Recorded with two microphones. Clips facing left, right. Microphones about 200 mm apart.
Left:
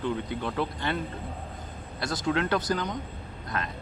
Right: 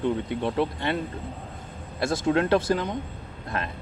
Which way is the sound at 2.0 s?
25° right (ahead or behind).